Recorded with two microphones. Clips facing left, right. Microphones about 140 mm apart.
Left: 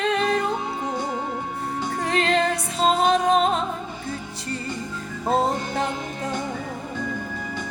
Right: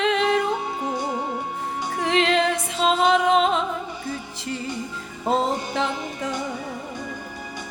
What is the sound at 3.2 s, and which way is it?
Music, 40° left (ahead or behind).